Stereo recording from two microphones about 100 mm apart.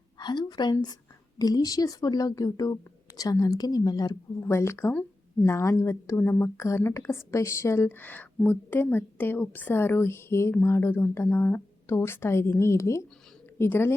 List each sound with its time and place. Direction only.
0.2 s a woman's voice: 45° left (ahead or behind)
4.4 s speech: 25° left (ahead or behind)